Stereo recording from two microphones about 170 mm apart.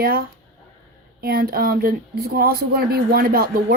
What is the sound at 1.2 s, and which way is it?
Speech, 60° right (ahead or behind).